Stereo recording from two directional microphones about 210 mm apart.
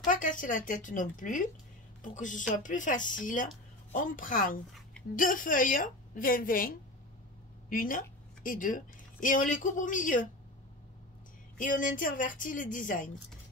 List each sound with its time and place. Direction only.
0.1 s a woman's voice: 40° left (ahead or behind)
7.7 s a woman's voice: 40° left (ahead or behind)
11.5 s a woman's voice: 40° left (ahead or behind)